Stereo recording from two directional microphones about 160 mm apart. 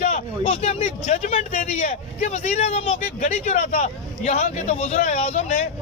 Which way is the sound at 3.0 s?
55° left (ahead or behind).